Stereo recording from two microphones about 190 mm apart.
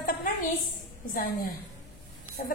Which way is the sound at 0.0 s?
45° left (ahead or behind).